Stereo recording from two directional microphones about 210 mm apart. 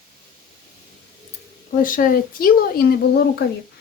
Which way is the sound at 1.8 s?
40° left (ahead or behind).